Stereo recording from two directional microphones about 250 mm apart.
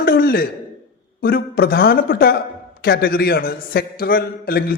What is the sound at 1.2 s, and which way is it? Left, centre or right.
A man's voice, left.